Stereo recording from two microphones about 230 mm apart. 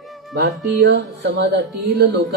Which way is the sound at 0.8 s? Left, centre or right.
Right.